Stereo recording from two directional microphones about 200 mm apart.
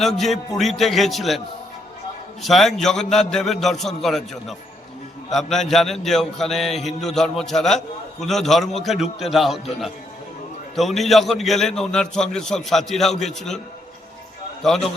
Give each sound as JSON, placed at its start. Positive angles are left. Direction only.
{"t": 0.0, "sound": "a man's voice", "side_deg": 0}
{"t": 2.4, "sound": "a man's voice", "side_deg": 0}
{"t": 14.6, "sound": "a man's voice", "side_deg": 0}